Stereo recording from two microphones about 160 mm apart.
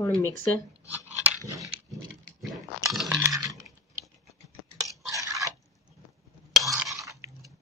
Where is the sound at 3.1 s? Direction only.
20° right (ahead or behind).